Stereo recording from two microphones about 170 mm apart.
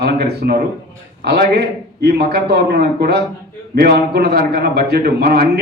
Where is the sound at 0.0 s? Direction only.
70° right (ahead or behind).